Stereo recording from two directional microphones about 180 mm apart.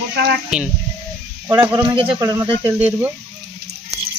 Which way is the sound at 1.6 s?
25° right (ahead or behind).